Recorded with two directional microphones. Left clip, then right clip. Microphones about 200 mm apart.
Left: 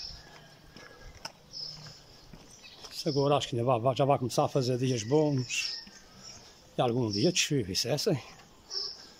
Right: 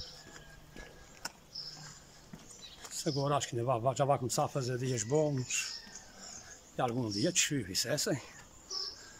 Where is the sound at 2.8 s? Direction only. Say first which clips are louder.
Left 6 dB; 10° left (ahead or behind).